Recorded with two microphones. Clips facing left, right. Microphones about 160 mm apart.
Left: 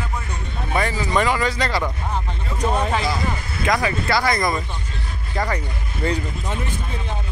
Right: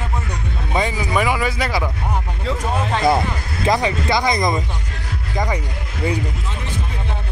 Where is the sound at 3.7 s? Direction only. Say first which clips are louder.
Right 2 dB; 20° right (ahead or behind).